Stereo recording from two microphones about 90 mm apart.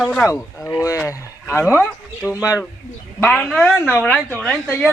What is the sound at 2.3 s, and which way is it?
Speech, 35° left (ahead or behind).